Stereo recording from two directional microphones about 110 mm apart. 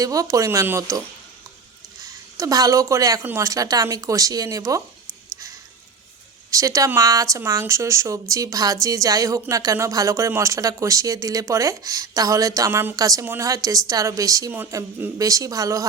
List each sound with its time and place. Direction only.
0.0 s speech: 30° right (ahead or behind)
6.5 s speech: 30° right (ahead or behind)